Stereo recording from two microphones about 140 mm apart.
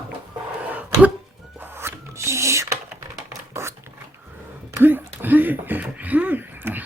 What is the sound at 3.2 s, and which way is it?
Scratch, 20° right (ahead or behind).